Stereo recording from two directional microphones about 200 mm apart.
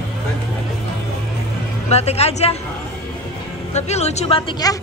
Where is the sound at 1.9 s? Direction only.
30° left (ahead or behind).